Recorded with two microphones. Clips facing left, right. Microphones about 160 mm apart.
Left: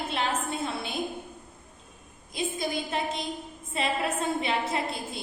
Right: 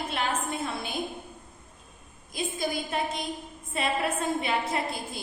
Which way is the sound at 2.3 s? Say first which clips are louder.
Even; 25° left (ahead or behind).